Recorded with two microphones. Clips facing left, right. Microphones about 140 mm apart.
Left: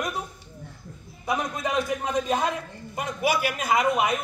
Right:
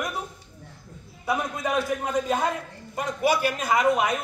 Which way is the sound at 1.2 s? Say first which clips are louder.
Right 1 dB; 20° left (ahead or behind).